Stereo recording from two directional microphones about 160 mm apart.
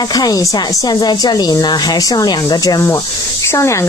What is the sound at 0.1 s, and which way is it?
Speech, 25° left (ahead or behind).